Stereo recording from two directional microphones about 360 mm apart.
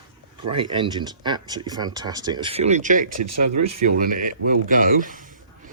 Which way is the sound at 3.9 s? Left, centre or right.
Right.